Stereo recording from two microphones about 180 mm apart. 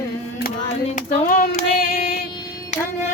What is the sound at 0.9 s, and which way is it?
Female singing, 50° left (ahead or behind).